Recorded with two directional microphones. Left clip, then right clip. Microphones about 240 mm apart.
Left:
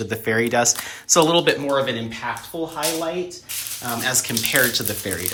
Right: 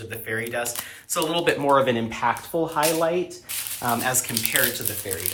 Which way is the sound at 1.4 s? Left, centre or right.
Centre.